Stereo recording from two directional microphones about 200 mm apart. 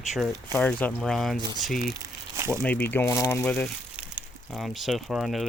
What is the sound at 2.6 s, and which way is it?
Speech, 10° left (ahead or behind).